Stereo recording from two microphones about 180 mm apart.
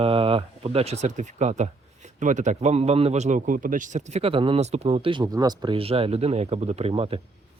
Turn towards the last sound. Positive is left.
turn(degrees=-30)  # may be behind; listen again after turning